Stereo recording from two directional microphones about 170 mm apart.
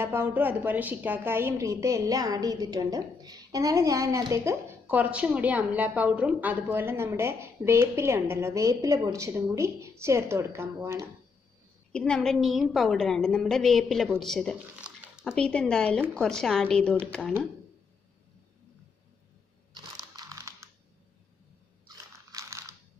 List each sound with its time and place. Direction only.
0.0 s a woman's voice: 15° right (ahead or behind)
11.9 s a woman's voice: 5° left (ahead or behind)
15.3 s a woman's voice: 5° left (ahead or behind)
19.7 s computer keyboard: 20° right (ahead or behind)
21.8 s biting: 20° right (ahead or behind)